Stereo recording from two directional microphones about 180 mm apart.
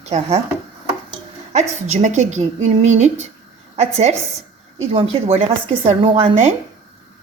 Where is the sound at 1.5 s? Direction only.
40° right (ahead or behind).